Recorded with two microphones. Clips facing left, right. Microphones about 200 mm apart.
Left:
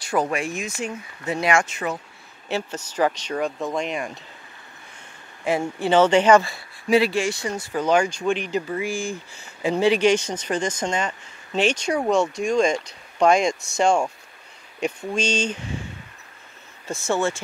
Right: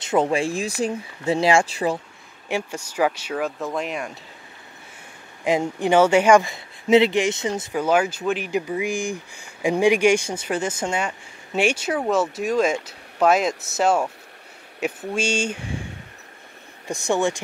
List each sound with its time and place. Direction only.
0.0 s speech: 25° right (ahead or behind)
2.4 s speech: 10° right (ahead or behind)
5.4 s speech: 15° right (ahead or behind)
7.7 s speech: 5° right (ahead or behind)
16.8 s speech: 15° right (ahead or behind)